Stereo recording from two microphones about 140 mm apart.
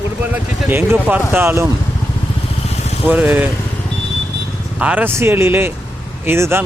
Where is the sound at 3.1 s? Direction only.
10° right (ahead or behind).